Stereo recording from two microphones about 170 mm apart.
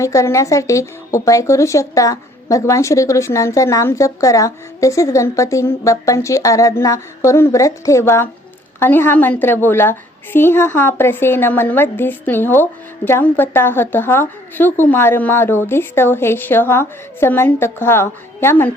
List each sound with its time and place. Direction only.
0.0 s speech: 20° left (ahead or behind)